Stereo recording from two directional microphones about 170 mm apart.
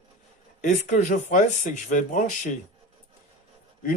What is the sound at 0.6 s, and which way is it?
Speech, 45° left (ahead or behind).